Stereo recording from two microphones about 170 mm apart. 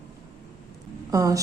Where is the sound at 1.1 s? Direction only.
20° right (ahead or behind).